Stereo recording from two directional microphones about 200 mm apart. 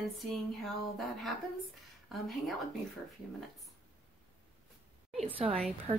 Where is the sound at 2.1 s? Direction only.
Centre (ahead or behind).